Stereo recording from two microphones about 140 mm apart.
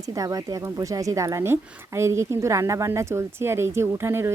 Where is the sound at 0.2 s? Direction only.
25° right (ahead or behind).